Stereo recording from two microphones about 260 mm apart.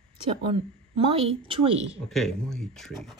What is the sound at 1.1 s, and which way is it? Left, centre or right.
Speech, right.